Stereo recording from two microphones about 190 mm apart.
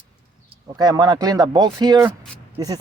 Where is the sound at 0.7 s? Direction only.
20° right (ahead or behind).